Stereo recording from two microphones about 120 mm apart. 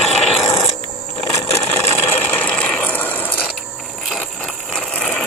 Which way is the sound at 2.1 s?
15° left (ahead or behind).